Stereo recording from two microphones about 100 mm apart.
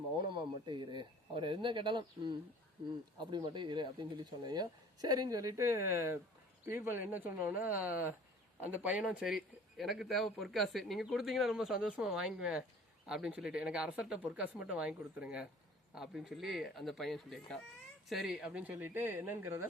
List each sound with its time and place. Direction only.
0.2 s speech: 50° right (ahead or behind)
3.2 s speech: 50° right (ahead or behind); by 9.0 s 15° right (ahead or behind)
9.0 s speech: 5° right (ahead or behind); by 19.6 s 25° right (ahead or behind)